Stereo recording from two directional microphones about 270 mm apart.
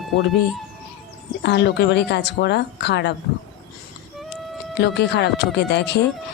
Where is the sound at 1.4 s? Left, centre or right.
Left.